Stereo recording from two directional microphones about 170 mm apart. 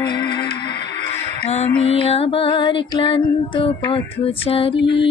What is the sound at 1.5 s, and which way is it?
Music, 35° left (ahead or behind).